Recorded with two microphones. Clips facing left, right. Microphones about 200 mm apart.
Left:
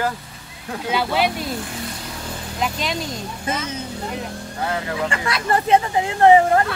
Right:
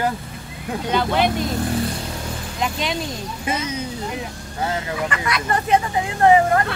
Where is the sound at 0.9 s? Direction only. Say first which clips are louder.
Right 1 dB; 5° left (ahead or behind).